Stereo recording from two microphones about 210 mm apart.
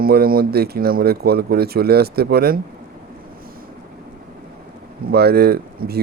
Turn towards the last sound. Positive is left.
turn(degrees=-50)  # may be behind; listen again after turning